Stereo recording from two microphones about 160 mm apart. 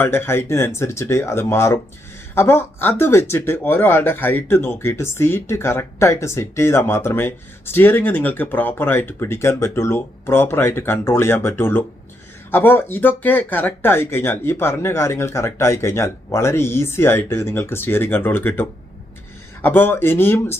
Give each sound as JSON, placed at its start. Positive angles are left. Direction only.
{"t": 0.0, "sound": "speech", "side_deg": 15}